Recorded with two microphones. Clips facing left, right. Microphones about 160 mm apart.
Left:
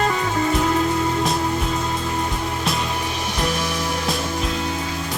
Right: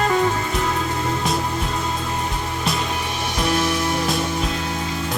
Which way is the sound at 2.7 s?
Centre (ahead or behind).